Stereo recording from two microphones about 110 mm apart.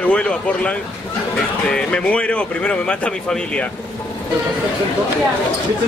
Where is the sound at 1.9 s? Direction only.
10° left (ahead or behind).